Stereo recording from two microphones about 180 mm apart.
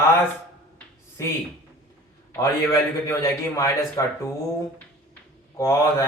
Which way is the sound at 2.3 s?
20° left (ahead or behind).